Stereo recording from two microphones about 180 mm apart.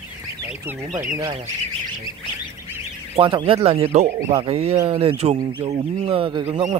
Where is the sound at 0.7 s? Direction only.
10° right (ahead or behind).